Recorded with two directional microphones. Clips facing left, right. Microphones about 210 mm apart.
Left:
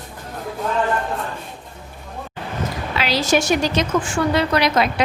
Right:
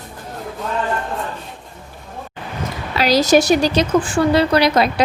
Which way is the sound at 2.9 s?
40° right (ahead or behind).